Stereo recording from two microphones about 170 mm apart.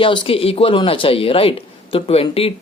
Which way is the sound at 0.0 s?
30° left (ahead or behind).